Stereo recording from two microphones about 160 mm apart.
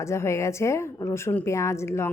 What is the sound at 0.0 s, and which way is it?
A woman's voice, 15° left (ahead or behind).